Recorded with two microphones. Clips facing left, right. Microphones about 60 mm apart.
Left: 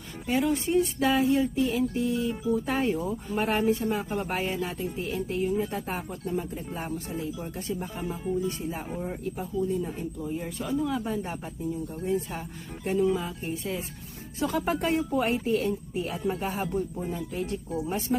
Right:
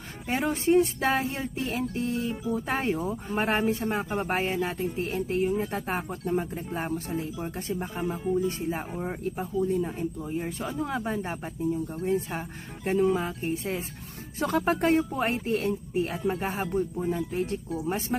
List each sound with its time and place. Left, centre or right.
0.3 s speech: right
14.3 s speech: right
14.7 s speech: right
16.2 s speech: right
17.8 s speech: right